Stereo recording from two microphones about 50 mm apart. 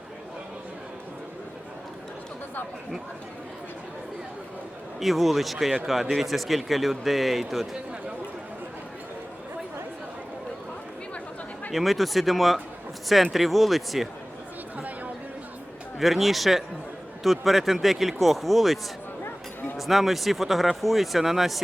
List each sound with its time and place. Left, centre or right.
4.9 s speech: centre
11.7 s speech: centre
14.8 s chatter: right
16.0 s speech: centre